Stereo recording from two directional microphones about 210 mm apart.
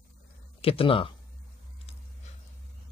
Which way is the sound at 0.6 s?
25° left (ahead or behind).